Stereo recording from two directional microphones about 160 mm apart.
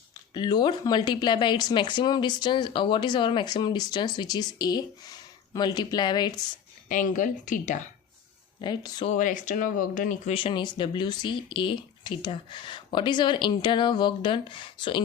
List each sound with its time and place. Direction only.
0.3 s speech: 25° left (ahead or behind)
6.8 s speech: 55° left (ahead or behind)
8.6 s speech: 25° left (ahead or behind)
9.0 s speech: 50° left (ahead or behind)
10.3 s speech: 30° left (ahead or behind)